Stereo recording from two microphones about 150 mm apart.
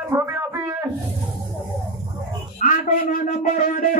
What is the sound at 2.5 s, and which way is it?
Speech, 60° left (ahead or behind).